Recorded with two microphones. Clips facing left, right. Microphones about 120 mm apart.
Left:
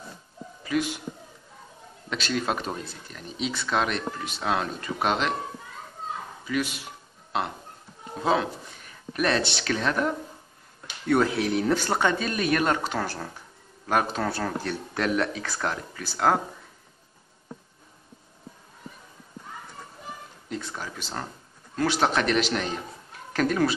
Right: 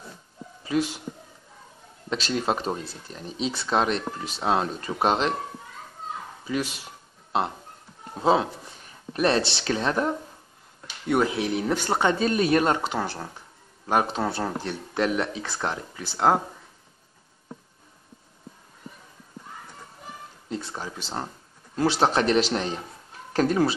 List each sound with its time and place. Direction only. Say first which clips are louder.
0.7 s speech: right 1 dB; 30° right (ahead or behind)
2.0 s speech: right 2 dB; 30° right (ahead or behind)
6.4 s speech: even; 30° right (ahead or behind)
7.3 s music: right 3 dB; 30° right (ahead or behind)
8.2 s speech: right 3 dB; 30° right (ahead or behind)
11.1 s speech: left 1 dB; 15° right (ahead or behind)
20.4 s speech: right 1 dB; 25° right (ahead or behind)